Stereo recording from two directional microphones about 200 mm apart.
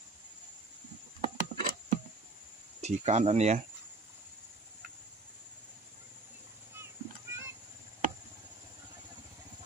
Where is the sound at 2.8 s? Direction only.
35° right (ahead or behind).